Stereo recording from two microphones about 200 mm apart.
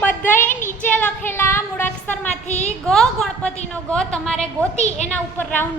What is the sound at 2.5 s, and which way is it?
Speech, 35° left (ahead or behind).